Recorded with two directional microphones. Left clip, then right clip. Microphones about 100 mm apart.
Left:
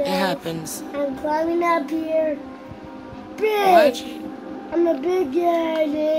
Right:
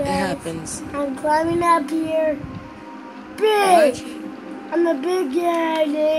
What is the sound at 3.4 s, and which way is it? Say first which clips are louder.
A woman's voice: right 1 dB; 15° right (ahead or behind).